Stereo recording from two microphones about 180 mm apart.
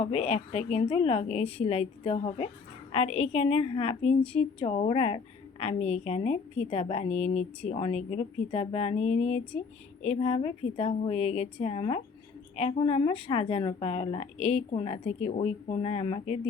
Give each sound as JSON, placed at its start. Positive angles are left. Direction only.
{"t": 0.0, "sound": "a woman's voice", "side_deg": 35}